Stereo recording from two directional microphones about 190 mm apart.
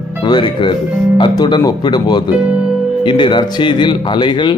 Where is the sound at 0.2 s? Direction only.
25° left (ahead or behind).